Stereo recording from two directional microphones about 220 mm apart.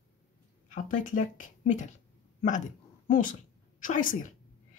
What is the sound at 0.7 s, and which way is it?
Speech, 35° left (ahead or behind).